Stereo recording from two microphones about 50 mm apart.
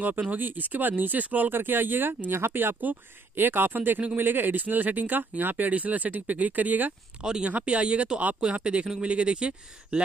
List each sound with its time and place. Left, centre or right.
0.0 s speech: right
2.8 s speech: right